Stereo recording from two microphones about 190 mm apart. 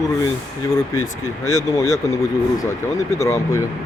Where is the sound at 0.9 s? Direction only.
15° left (ahead or behind).